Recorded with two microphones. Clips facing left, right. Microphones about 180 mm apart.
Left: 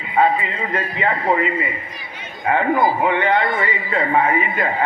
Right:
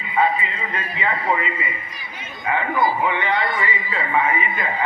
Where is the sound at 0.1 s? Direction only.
50° left (ahead or behind).